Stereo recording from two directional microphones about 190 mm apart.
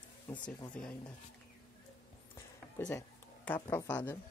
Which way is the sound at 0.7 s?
5° left (ahead or behind).